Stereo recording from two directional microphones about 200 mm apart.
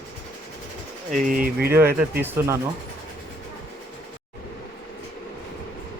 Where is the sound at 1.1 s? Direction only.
45° right (ahead or behind).